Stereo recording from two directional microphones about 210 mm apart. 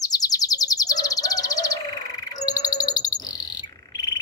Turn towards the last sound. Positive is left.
turn(degrees=20)  # may be behind; listen again after turning